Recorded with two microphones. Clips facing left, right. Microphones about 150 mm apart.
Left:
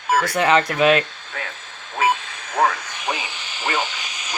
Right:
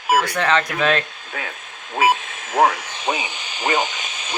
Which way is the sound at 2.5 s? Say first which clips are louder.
Right 3 dB; 25° right (ahead or behind).